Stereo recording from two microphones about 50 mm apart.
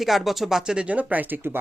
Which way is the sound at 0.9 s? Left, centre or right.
Right.